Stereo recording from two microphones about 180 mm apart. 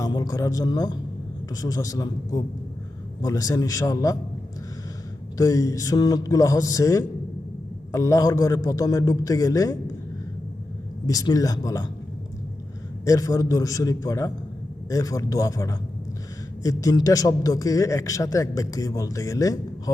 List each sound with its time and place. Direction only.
0.0 s a man's voice: 20° left (ahead or behind)
5.4 s a man's voice: 20° left (ahead or behind)
11.0 s a man's voice: 20° left (ahead or behind)
13.1 s a man's voice: 20° left (ahead or behind)